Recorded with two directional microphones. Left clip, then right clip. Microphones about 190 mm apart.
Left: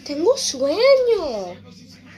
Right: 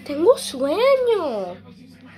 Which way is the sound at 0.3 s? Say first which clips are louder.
Right 1 dB; 5° right (ahead or behind).